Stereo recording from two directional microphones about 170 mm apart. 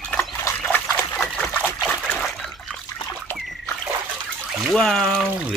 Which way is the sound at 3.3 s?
Centre (ahead or behind).